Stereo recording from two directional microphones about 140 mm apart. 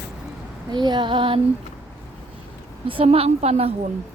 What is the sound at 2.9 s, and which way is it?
Speech, 40° right (ahead or behind).